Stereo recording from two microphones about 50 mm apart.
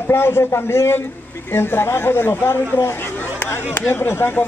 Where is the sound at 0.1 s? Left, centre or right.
Left.